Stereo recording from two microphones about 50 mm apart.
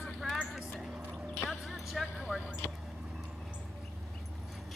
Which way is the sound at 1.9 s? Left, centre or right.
Centre.